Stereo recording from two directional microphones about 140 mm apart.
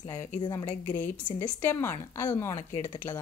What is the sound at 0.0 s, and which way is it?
Speech, 25° left (ahead or behind).